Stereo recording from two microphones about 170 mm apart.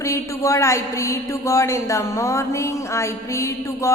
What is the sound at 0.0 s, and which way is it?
A woman's voice, 15° left (ahead or behind).